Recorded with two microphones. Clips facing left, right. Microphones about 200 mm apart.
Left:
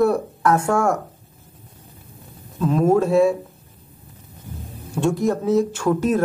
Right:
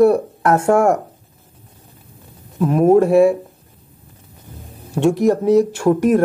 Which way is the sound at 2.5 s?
15° right (ahead or behind).